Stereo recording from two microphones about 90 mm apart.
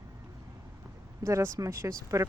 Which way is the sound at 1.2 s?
35° right (ahead or behind).